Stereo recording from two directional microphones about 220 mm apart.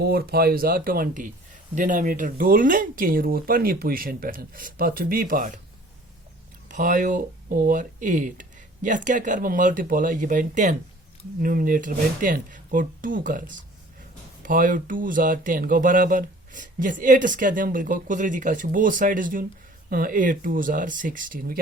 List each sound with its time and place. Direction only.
0.0 s speech: 45° right (ahead or behind)
6.7 s speech: 35° right (ahead or behind)